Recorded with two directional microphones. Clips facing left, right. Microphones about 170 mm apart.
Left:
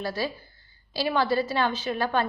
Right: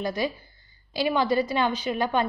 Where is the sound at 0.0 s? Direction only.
15° right (ahead or behind).